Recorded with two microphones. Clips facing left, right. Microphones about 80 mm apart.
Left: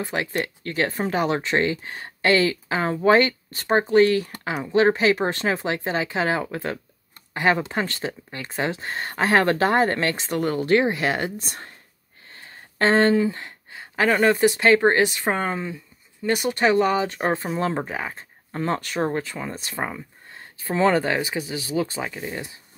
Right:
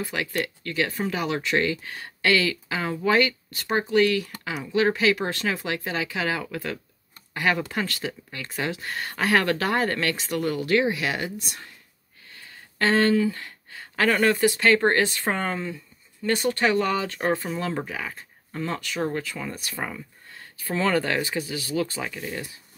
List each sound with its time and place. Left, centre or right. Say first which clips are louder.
0.0 s speech: left 2 dB; left
12.3 s a sound: left 2 dB; left
14.0 s speech: left 2 dB; centre
14.3 s speech: left 3 dB; left
17.3 s speech: left 2 dB; left